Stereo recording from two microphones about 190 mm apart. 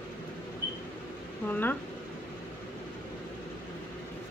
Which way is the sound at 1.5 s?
10° left (ahead or behind).